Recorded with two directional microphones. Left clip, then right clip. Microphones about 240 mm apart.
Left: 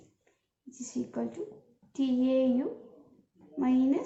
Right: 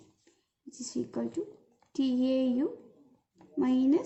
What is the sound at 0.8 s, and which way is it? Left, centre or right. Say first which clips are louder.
A woman's voice: even; right.